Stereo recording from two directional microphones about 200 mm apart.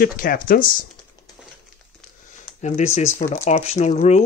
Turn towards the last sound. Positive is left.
turn(degrees=30)  # may be behind; listen again after turning